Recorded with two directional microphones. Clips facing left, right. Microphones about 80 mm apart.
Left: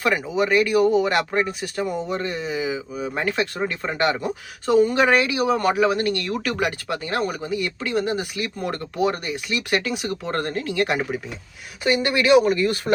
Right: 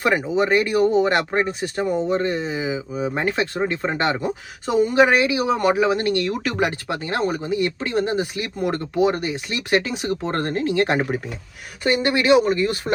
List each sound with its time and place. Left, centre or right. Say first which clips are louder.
0.0 s speech: right 2 dB; right